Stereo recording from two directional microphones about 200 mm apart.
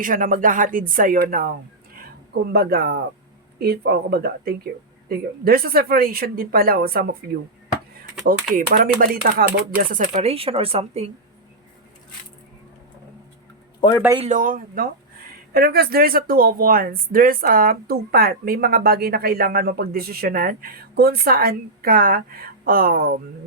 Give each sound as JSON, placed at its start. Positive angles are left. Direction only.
{"t": 0.0, "sound": "speech", "side_deg": -40}
{"t": 2.5, "sound": "speech", "side_deg": -50}
{"t": 8.7, "sound": "speech", "side_deg": -45}
{"t": 14.2, "sound": "speech", "side_deg": -40}